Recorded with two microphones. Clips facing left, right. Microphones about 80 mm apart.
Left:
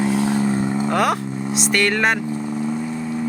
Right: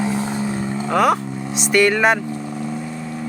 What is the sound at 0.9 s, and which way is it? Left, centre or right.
Speech, centre.